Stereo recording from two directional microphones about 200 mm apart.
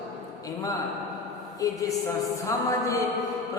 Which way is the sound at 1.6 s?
15° left (ahead or behind).